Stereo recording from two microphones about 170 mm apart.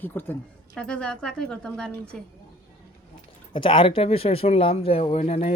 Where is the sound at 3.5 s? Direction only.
30° left (ahead or behind).